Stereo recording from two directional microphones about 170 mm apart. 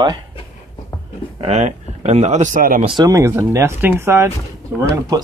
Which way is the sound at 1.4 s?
40° right (ahead or behind).